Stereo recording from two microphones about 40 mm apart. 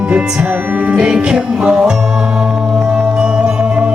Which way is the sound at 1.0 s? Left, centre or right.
Right.